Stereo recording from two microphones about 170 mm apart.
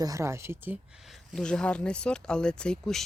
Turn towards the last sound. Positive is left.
turn(degrees=5)  # may be behind; listen again after turning